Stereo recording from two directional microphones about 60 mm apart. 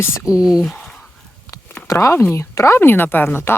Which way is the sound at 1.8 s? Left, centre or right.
Left.